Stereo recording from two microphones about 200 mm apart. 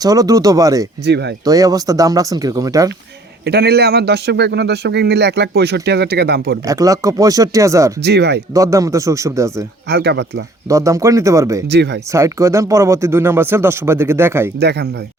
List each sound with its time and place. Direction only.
0.0 s speech: 15° right (ahead or behind)
1.0 s a man's voice: 55° right (ahead or behind)
1.5 s speech: 15° right (ahead or behind)
3.4 s a man's voice: 55° right (ahead or behind)
6.7 s speech: 15° right (ahead or behind)
8.0 s a man's voice: 55° right (ahead or behind)
8.5 s speech: 15° right (ahead or behind)
9.9 s a man's voice: 60° right (ahead or behind)
10.7 s speech: 15° right (ahead or behind)
11.7 s a man's voice: 55° right (ahead or behind)
12.1 s speech: 15° right (ahead or behind)
14.6 s a man's voice: 55° right (ahead or behind)